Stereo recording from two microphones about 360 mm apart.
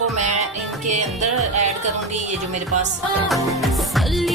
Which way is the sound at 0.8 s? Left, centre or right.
Centre.